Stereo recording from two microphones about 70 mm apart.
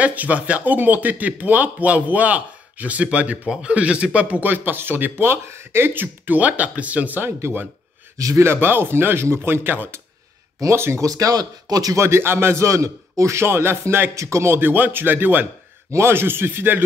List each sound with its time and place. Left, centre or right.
0.0 s speech: right
7.2 s a man's voice: right
8.2 s a man's voice: right
8.5 s a man's voice: right
11.1 s speech: right
12.0 s a man's voice: right
14.1 s a man's voice: right